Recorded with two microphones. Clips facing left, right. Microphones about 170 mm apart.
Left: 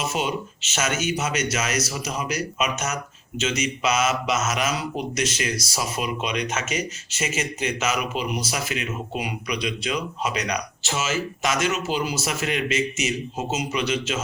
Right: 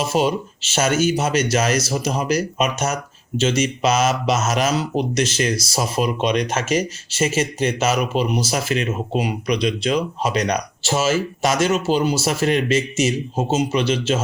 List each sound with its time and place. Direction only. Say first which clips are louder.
0.0 s speech: right 7 dB; 35° right (ahead or behind)